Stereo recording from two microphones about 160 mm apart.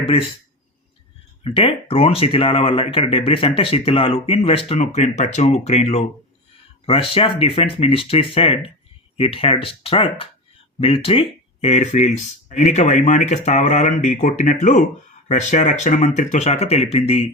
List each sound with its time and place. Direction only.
1.5 s speech: 40° left (ahead or behind)